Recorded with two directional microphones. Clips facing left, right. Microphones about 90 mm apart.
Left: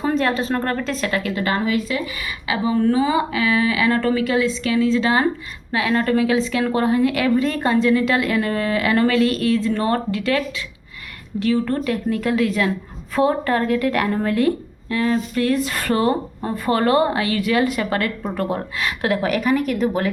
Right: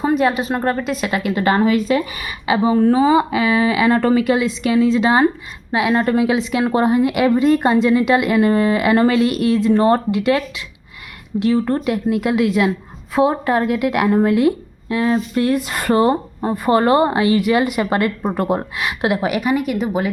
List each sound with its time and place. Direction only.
0.1 s a woman's voice: 10° right (ahead or behind)
11.4 s a woman's voice: 20° right (ahead or behind)